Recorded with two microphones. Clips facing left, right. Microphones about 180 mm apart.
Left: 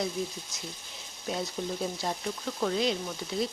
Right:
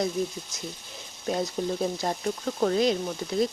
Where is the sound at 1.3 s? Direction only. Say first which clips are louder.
Right 5 dB; 50° right (ahead or behind).